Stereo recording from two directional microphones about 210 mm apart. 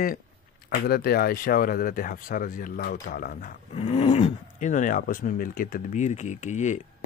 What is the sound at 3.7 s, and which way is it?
Speech, 30° left (ahead or behind).